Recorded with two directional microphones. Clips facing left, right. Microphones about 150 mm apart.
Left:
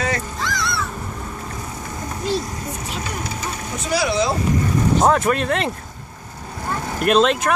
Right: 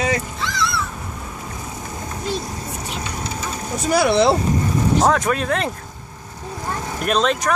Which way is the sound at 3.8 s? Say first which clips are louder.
Right 5 dB; 55° right (ahead or behind).